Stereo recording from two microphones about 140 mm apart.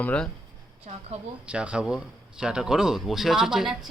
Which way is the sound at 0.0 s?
10° left (ahead or behind).